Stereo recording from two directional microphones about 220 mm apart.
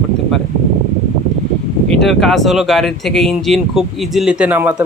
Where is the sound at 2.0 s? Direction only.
Centre (ahead or behind).